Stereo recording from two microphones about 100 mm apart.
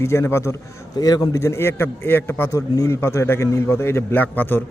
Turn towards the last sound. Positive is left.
turn(degrees=20)  # may be behind; listen again after turning